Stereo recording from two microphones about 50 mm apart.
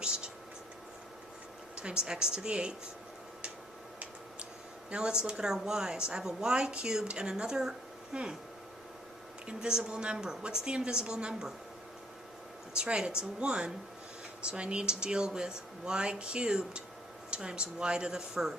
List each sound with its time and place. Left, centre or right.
1.7 s a woman's voice: centre
4.9 s a woman's voice: centre
9.5 s a woman's voice: centre
12.7 s a woman's voice: centre